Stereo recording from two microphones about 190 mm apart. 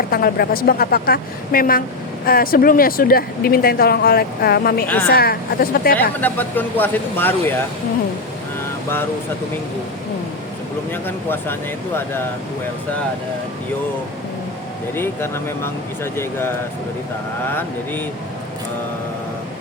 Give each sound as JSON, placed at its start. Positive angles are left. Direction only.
{"t": 0.1, "sound": "speech", "side_deg": 50}
{"t": 6.1, "sound": "speech", "side_deg": 10}
{"t": 10.9, "sound": "speech", "side_deg": 10}
{"t": 14.9, "sound": "speech", "side_deg": 10}
{"t": 17.4, "sound": "speech", "side_deg": 10}